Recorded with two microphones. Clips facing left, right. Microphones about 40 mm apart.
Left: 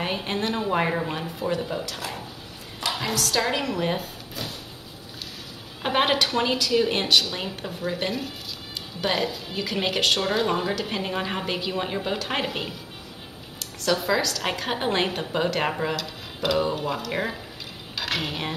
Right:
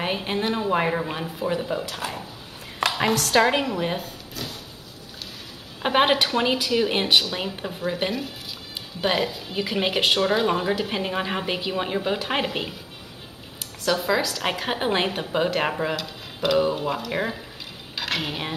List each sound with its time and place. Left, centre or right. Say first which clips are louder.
0.0 s a woman's voice: right 2 dB; centre
2.0 s a woman's voice: right 2 dB; right
2.8 s a woman's voice: right 5 dB; right
3.3 s a woman's voice: right 6 dB; right
3.7 s speech: even; centre
5.8 s a woman's voice: right 2 dB; centre